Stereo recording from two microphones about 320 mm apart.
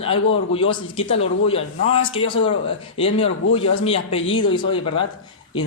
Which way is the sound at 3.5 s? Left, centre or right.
Centre.